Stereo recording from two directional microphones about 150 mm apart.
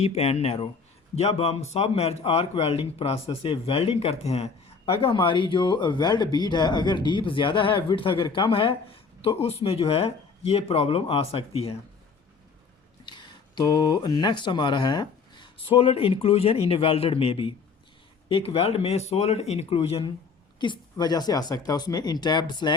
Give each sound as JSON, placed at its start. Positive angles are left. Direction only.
{"t": 0.0, "sound": "a man's voice", "side_deg": 40}
{"t": 13.1, "sound": "a man's voice", "side_deg": 30}